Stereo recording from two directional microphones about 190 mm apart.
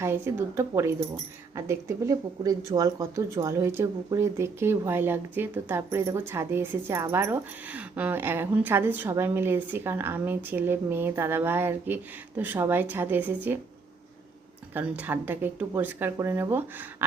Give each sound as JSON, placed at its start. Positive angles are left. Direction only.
{"t": 0.0, "sound": "speech", "side_deg": -15}
{"t": 14.7, "sound": "speech", "side_deg": -10}